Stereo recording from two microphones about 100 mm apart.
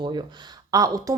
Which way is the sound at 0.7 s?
35° right (ahead or behind).